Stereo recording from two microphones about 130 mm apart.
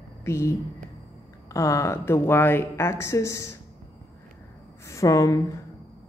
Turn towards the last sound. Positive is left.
turn(degrees=25)  # may be behind; listen again after turning